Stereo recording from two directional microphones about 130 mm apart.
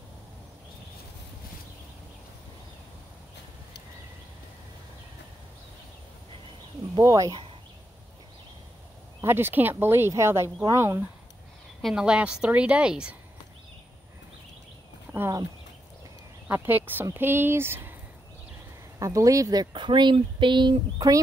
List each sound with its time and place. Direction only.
7.0 s speech: 25° right (ahead or behind)
9.2 s speech: 15° right (ahead or behind)
11.8 s speech: 5° right (ahead or behind)
15.1 s speech: 25° right (ahead or behind)
16.4 s speech: 15° right (ahead or behind)
18.9 s speech: 25° right (ahead or behind)